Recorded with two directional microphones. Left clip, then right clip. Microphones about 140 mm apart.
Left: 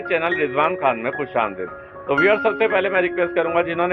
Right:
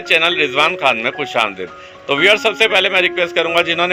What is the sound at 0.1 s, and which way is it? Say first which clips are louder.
A man's voice: right 7 dB; 20° right (ahead or behind).